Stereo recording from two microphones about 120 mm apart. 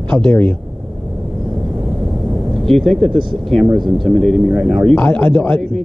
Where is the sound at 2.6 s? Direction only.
Centre (ahead or behind).